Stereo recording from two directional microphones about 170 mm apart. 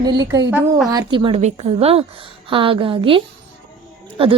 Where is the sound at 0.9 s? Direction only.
25° right (ahead or behind).